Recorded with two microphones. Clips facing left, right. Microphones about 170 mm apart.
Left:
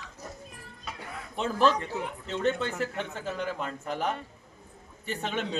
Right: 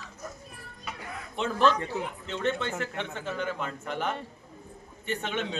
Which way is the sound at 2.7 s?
Centre (ahead or behind).